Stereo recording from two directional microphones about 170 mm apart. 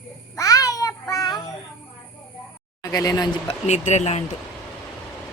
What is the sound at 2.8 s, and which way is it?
Speech, 20° left (ahead or behind).